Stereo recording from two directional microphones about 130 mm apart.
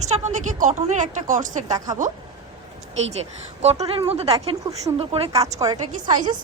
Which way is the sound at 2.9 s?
55° right (ahead or behind).